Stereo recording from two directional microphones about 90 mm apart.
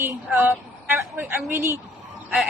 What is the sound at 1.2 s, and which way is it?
Speech, 25° right (ahead or behind).